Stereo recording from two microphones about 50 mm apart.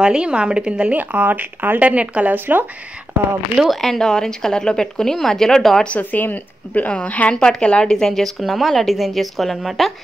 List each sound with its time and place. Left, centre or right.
0.0 s a woman's voice: centre
0.9 s speech: right
1.8 s a woman's voice: right
2.3 s speech: right
3.7 s speech: centre
5.9 s a woman's voice: left; by 8.1 s centre
8.1 s a woman's voice: centre